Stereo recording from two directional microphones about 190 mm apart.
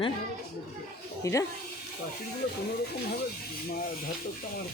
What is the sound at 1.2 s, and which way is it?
Speech, 15° left (ahead or behind).